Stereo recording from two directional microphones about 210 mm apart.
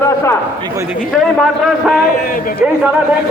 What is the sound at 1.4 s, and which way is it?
Speech, centre (ahead or behind).